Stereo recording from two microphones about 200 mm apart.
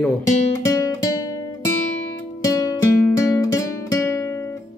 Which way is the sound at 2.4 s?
15° left (ahead or behind).